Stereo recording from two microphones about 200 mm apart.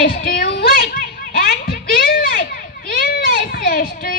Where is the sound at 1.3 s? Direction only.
50° left (ahead or behind).